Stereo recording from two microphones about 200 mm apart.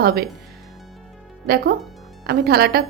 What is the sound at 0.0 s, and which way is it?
Speech, 50° right (ahead or behind).